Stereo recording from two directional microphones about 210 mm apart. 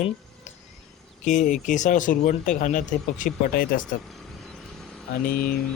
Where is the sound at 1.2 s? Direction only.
35° left (ahead or behind).